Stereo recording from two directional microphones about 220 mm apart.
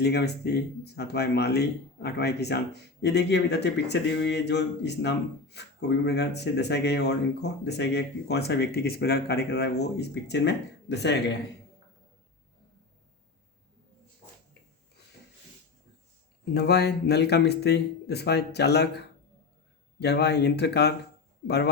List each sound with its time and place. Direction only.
0.0 s speech: 50° left (ahead or behind)
16.6 s speech: 50° left (ahead or behind)